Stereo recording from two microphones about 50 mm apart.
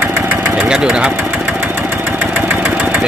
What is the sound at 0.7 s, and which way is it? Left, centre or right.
Speech, centre.